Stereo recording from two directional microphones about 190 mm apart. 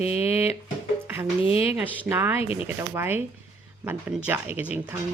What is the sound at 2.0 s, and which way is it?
Speech, 10° right (ahead or behind).